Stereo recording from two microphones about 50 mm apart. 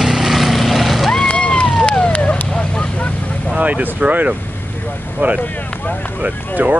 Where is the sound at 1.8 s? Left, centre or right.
Left.